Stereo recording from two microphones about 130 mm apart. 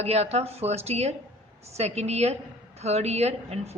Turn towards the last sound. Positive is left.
turn(degrees=-55)  # may be behind; listen again after turning